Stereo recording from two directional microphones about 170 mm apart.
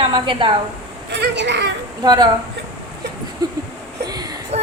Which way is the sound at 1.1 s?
90° right.